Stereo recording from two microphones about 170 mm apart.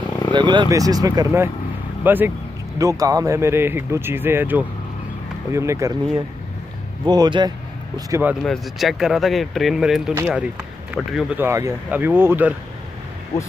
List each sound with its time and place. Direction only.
0.3 s speech: 25° right (ahead or behind)
7.1 s speech: 25° right (ahead or behind)
8.1 s speech: 10° right (ahead or behind)
8.5 s speech: centre (ahead or behind)
11.3 s speech: 15° right (ahead or behind)